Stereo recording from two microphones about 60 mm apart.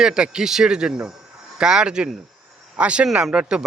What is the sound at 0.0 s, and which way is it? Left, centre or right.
Speech, centre.